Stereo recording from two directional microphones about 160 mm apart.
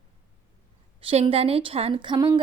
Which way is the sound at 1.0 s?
35° right (ahead or behind).